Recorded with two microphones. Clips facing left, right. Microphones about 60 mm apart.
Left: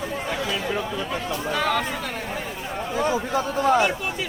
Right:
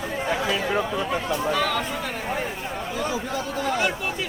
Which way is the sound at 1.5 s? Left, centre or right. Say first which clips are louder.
Left 4 dB; centre.